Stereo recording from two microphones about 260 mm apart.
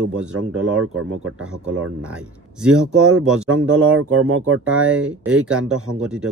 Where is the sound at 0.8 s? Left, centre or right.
Right.